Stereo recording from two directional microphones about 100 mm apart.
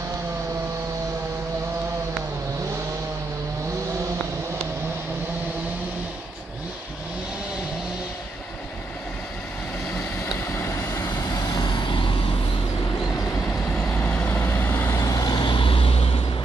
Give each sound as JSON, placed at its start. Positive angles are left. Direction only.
{"t": 10.4, "sound": "vehicle", "side_deg": 25}
{"t": 11.2, "sound": "vehicle", "side_deg": 40}
{"t": 13.5, "sound": "vehicle", "side_deg": 15}